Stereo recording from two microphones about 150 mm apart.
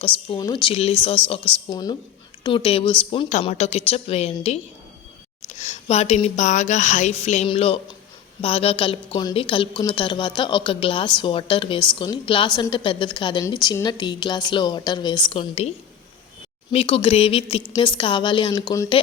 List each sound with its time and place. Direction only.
0.0 s a woman's voice: 35° left (ahead or behind)
3.5 s music: 45° left (ahead or behind)
5.5 s a sound: 50° left (ahead or behind)
6.2 s music: 50° left (ahead or behind)
7.4 s a woman's voice: 40° left (ahead or behind)
16.7 s a woman's voice: 40° left (ahead or behind)